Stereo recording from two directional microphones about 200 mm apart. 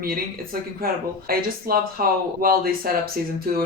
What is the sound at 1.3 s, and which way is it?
Speech, 50° right (ahead or behind).